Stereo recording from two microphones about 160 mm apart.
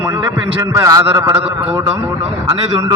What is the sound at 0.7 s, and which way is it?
A man's voice, 20° right (ahead or behind).